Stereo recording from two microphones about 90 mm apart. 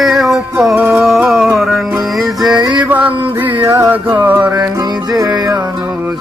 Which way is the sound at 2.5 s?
50° right (ahead or behind).